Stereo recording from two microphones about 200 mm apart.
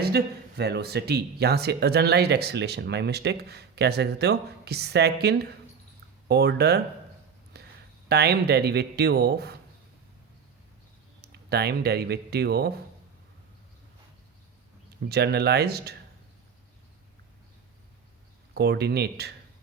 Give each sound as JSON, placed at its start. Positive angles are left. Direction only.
{"t": 0.0, "sound": "speech", "side_deg": -55}
{"t": 11.2, "sound": "speech", "side_deg": -55}
{"t": 15.1, "sound": "speech", "side_deg": -55}
{"t": 18.5, "sound": "speech", "side_deg": -55}